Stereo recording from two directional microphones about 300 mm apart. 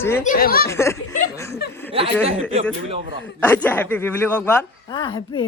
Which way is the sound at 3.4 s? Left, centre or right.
Centre.